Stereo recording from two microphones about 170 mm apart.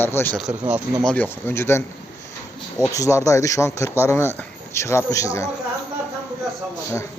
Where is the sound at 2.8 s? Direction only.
20° left (ahead or behind).